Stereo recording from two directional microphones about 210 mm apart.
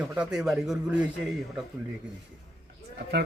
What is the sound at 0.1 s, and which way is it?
Speech, 5° right (ahead or behind).